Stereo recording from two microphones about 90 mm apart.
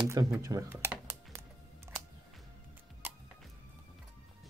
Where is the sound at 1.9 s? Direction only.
25° right (ahead or behind).